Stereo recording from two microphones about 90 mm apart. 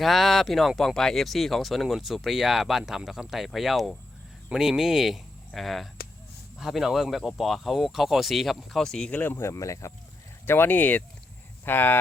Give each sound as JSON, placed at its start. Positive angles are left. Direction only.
{"t": 0.0, "sound": "speech", "side_deg": 0}
{"t": 9.5, "sound": "speech", "side_deg": 35}
{"t": 10.4, "sound": "speech", "side_deg": 25}